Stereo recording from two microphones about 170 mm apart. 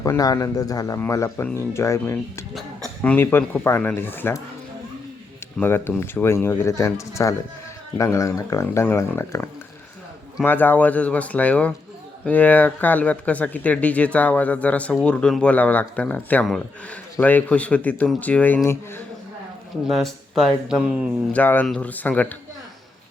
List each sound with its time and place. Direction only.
0.0 s a man's voice: 20° left (ahead or behind)
2.6 s speech: 5° left (ahead or behind)
5.5 s speech: 10° left (ahead or behind)
19.9 s speech: centre (ahead or behind)
21.3 s speech: 10° left (ahead or behind)